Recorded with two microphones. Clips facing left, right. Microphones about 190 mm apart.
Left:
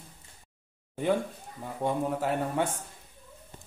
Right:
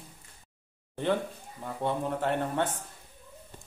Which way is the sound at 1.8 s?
5° left (ahead or behind).